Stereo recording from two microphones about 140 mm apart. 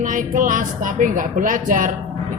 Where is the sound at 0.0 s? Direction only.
70° right (ahead or behind).